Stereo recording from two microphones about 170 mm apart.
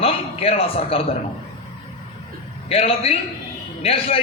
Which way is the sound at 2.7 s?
35° left (ahead or behind).